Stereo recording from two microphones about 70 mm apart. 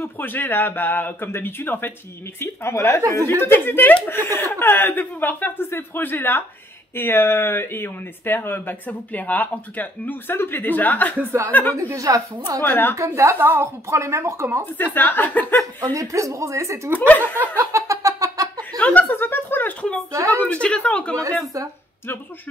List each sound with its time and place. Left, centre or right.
0.0 s speech: left
11.7 s speech: right
12.6 s speech: left
12.9 s a woman's voice: right
14.8 s speech: left
15.9 s speech: right
17.1 s speech: left
17.7 s a sound: right
18.8 s a sound: left
20.1 s speech: right
20.3 s speech: centre
21.5 s a woman's voice: right